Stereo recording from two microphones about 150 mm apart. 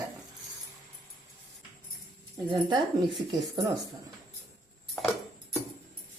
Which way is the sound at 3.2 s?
25° right (ahead or behind).